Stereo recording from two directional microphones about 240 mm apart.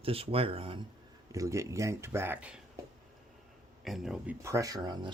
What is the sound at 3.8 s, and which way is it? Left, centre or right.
Speech, centre.